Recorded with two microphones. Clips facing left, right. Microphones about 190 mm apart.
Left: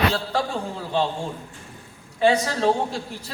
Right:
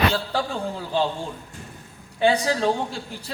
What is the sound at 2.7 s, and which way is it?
Speech, 35° left (ahead or behind).